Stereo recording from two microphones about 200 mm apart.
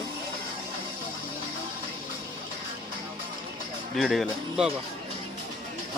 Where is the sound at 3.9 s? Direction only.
Centre (ahead or behind).